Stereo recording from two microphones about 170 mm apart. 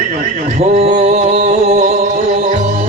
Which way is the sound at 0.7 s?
40° right (ahead or behind).